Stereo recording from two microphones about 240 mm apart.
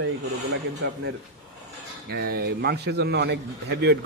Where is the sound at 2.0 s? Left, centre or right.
Right.